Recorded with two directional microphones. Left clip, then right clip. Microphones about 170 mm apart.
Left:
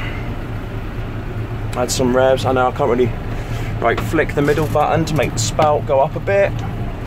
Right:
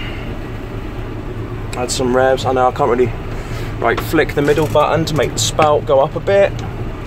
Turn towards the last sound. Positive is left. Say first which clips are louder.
# right 3 dB
turn(degrees=-10)  # may be behind; listen again after turning